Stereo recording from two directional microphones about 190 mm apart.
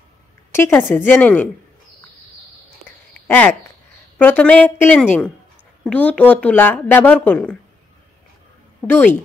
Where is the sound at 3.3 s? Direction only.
10° left (ahead or behind).